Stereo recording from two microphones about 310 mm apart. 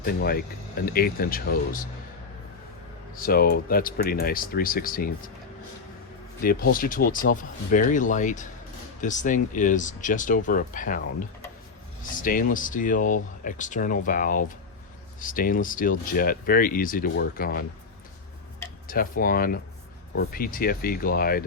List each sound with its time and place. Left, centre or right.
0.0 s speech: left
3.2 s speech: left
6.4 s speech: left
18.9 s speech: left